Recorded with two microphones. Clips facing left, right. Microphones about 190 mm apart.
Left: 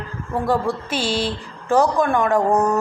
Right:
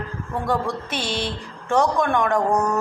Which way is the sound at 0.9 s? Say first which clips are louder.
Left 4 dB; 30° left (ahead or behind).